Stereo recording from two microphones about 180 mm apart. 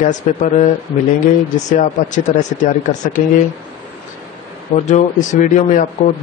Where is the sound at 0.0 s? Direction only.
45° left (ahead or behind).